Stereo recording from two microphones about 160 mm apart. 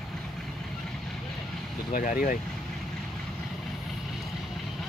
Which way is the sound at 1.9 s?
60° left (ahead or behind).